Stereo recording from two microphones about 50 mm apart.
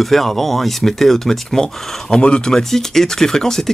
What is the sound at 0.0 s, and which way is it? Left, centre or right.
Speech, centre.